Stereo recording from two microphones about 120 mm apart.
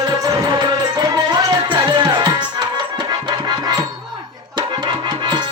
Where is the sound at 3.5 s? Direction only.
35° right (ahead or behind).